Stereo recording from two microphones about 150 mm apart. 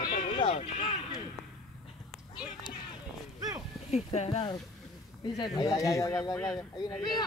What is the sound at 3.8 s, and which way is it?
Speech, 50° left (ahead or behind).